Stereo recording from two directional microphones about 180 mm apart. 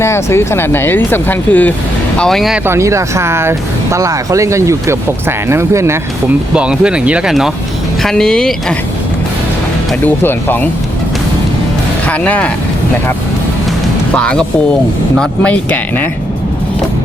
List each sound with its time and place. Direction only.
0.0 s speech: 15° left (ahead or behind)
2.6 s speech: 15° right (ahead or behind); by 8.5 s 5° left (ahead or behind)
10.2 s speech: 10° left (ahead or behind)
12.0 s speech: 10° left (ahead or behind)
14.1 s speech: 5° left (ahead or behind)